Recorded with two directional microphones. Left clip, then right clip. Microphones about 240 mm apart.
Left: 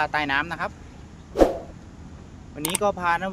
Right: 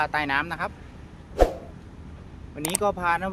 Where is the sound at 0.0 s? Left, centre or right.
Centre.